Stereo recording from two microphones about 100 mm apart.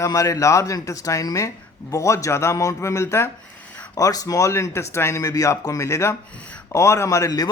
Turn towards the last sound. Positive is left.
turn(degrees=35)  # may be behind; listen again after turning